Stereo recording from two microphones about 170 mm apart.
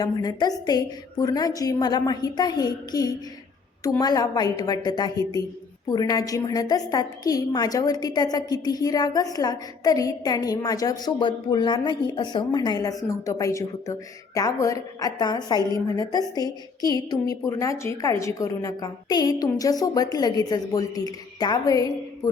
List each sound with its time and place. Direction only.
0.0 s a woman's voice: 25° left (ahead or behind)